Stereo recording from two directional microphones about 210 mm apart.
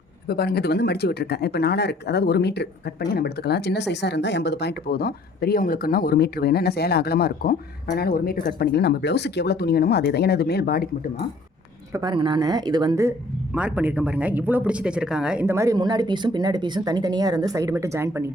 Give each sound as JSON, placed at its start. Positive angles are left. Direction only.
{"t": 0.3, "sound": "speech", "side_deg": 50}
{"t": 11.9, "sound": "speech", "side_deg": -20}